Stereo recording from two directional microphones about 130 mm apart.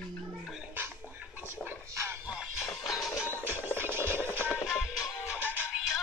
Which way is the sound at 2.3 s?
5° right (ahead or behind).